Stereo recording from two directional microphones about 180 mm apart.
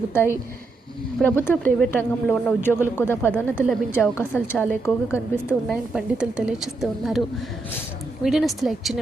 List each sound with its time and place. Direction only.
0.1 s speech: 15° left (ahead or behind)
5.6 s a woman's voice: centre (ahead or behind)
8.2 s a woman's voice: centre (ahead or behind)